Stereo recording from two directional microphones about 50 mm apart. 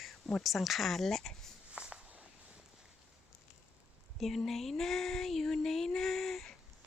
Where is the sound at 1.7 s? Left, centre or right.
Right.